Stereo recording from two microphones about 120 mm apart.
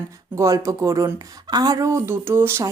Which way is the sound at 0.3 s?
25° right (ahead or behind).